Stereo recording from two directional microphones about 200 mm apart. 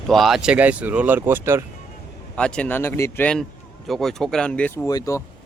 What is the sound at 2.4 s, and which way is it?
Speech, 5° left (ahead or behind).